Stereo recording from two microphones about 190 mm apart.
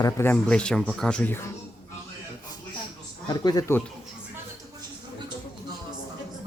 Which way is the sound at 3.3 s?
20° left (ahead or behind).